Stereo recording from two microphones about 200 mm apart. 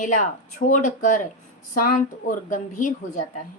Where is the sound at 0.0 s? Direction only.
40° left (ahead or behind).